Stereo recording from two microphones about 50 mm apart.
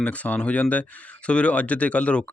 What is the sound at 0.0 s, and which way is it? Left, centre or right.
Speech, left.